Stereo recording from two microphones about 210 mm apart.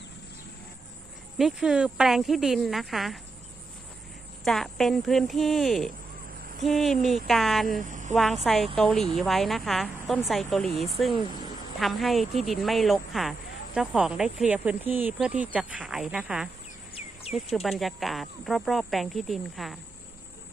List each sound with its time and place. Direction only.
1.4 s speech: centre (ahead or behind)
4.4 s speech: centre (ahead or behind)
7.8 s a sound: 35° right (ahead or behind)
8.1 s speech: centre (ahead or behind)
17.5 s speech: centre (ahead or behind)